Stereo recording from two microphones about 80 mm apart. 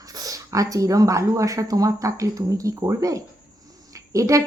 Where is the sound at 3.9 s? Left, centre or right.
Right.